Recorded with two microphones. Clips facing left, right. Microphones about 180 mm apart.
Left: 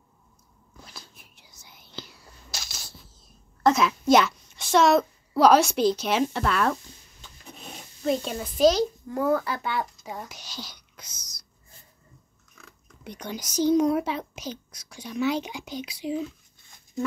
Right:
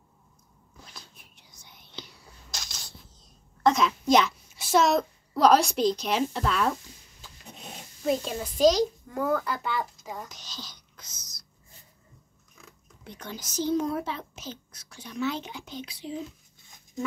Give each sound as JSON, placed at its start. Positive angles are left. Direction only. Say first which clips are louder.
{"t": 0.9, "sound": "whispering", "louder": "left 2 dB", "side_deg": 5}
{"t": 3.6, "sound": "a woman's voice", "louder": "left 2 dB", "side_deg": 5}
{"t": 8.0, "sound": "a child's voice", "louder": "left 1 dB", "side_deg": 0}
{"t": 13.0, "sound": "a child's voice", "louder": "left 5 dB", "side_deg": 15}